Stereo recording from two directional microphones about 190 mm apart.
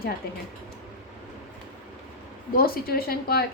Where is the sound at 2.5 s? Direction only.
50° left (ahead or behind).